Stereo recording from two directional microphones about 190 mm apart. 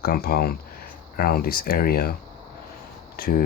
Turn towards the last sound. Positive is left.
turn(degrees=50)  # may be behind; listen again after turning